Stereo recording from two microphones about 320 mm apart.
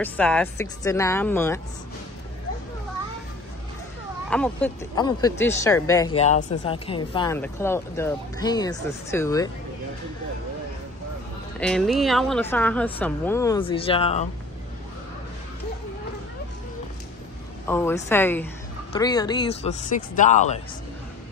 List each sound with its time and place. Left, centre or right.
0.0 s speech: centre
4.3 s speech: centre
11.6 s a woman's voice: centre
17.6 s speech: centre